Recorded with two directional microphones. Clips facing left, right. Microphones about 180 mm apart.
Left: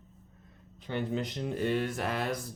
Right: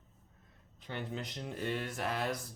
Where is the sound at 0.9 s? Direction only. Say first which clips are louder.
Left 8 dB; 75° left (ahead or behind).